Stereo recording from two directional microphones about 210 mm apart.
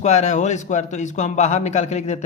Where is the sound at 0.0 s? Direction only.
35° left (ahead or behind).